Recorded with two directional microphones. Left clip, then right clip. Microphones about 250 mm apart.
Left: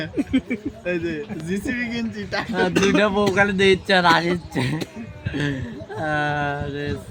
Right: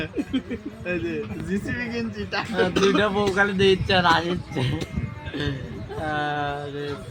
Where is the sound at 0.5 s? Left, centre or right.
Left.